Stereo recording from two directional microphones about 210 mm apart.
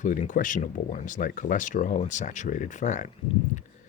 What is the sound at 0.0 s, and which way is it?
Speech, 35° left (ahead or behind).